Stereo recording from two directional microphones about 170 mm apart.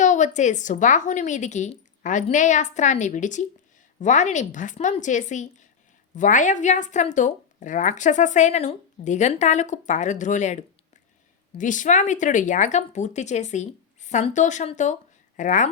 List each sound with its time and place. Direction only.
0.0 s speech: 45° left (ahead or behind)